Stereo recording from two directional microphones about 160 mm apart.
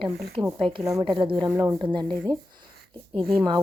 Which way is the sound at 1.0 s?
35° right (ahead or behind).